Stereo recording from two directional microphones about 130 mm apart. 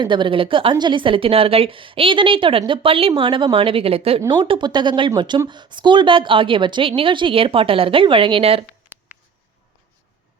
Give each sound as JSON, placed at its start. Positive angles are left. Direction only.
{"t": 0.0, "sound": "a woman's voice", "side_deg": -40}